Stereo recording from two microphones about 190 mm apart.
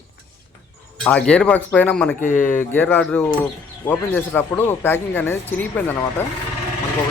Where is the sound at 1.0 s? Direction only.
5° left (ahead or behind).